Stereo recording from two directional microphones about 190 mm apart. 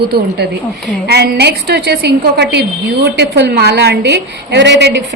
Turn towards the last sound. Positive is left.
turn(degrees=-65)  # may be behind; listen again after turning